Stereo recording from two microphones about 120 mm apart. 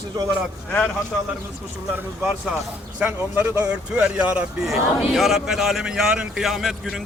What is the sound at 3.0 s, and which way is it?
Speech, 15° right (ahead or behind).